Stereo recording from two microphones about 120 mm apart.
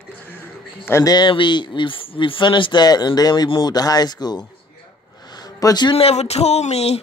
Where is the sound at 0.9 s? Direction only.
25° left (ahead or behind).